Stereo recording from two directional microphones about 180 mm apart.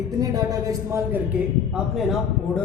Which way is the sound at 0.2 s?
20° right (ahead or behind).